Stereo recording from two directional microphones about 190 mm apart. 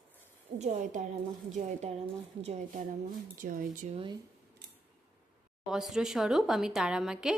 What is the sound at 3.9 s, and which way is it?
Speech, 25° right (ahead or behind).